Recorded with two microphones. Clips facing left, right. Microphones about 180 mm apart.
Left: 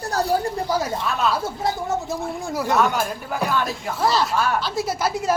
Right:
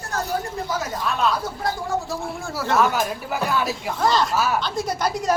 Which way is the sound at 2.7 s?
Centre (ahead or behind).